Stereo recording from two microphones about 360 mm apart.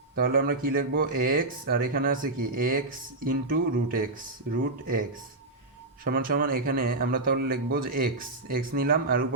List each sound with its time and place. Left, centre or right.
0.2 s speech: right
6.1 s speech: right